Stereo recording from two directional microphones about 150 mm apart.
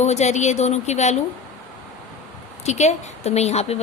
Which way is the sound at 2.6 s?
50° left (ahead or behind).